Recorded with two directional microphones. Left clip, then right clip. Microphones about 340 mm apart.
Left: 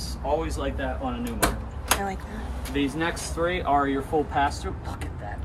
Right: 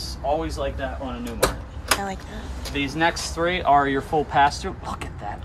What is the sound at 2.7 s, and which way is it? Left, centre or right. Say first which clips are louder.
Speech: right 5 dB; right.